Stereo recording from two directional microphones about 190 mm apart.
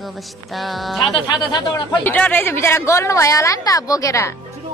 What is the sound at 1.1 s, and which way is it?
Speech, 20° left (ahead or behind).